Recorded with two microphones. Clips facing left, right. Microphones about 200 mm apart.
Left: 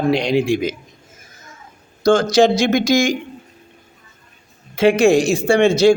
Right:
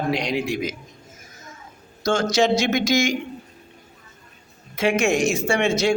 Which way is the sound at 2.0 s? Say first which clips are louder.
Left 7 dB; 35° left (ahead or behind).